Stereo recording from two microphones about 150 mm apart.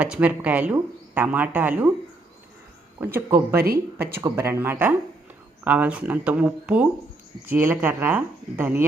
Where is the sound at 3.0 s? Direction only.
15° right (ahead or behind).